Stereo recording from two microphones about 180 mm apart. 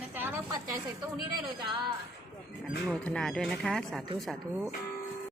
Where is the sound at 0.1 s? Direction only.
10° right (ahead or behind).